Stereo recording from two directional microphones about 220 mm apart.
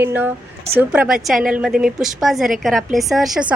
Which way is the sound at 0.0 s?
10° right (ahead or behind).